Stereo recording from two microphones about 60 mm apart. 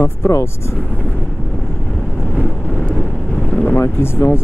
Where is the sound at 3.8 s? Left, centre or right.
Left.